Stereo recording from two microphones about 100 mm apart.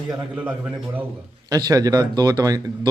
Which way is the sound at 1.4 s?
40° right (ahead or behind).